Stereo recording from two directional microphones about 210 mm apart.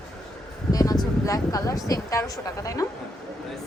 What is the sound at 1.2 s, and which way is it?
A woman's voice, 15° left (ahead or behind).